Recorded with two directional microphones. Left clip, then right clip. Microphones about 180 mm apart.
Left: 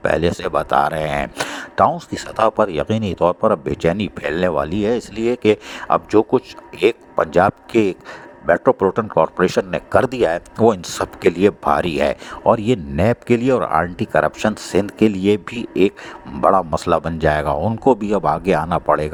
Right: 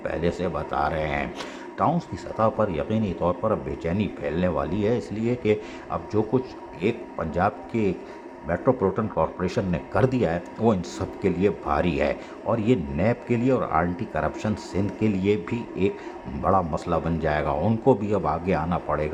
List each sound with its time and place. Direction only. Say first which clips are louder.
0.0 s speech: left 8 dB; 50° left (ahead or behind)